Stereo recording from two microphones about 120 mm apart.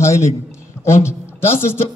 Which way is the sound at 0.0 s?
20° left (ahead or behind).